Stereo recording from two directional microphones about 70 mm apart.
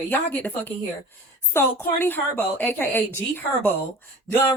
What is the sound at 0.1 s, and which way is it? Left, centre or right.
A woman's voice, left.